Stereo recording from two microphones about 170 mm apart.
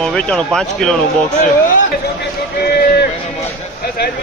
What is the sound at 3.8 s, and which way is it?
Speech, 65° left (ahead or behind).